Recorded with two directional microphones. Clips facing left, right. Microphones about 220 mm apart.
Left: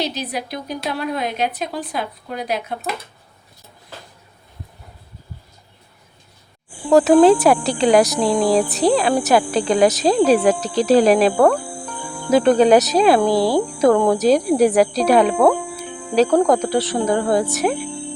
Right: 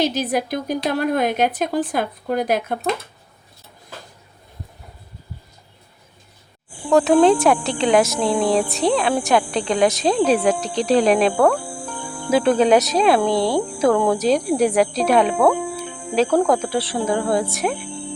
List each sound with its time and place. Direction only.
0.0 s a woman's voice: 50° right (ahead or behind)
6.9 s speech: centre (ahead or behind)
10.8 s cricket: centre (ahead or behind)
14.3 s speech: centre (ahead or behind)